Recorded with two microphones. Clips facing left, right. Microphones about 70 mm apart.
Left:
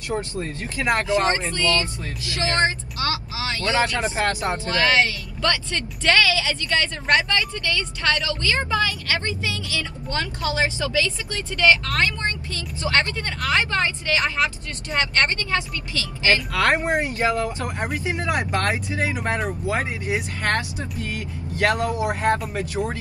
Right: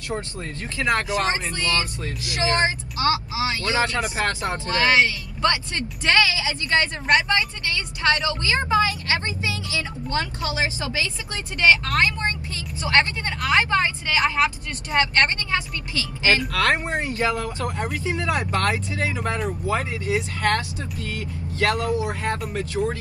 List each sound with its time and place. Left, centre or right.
0.7 s speech: left
1.0 s speech: right
4.0 s speech: left
4.6 s speech: right
16.5 s speech: left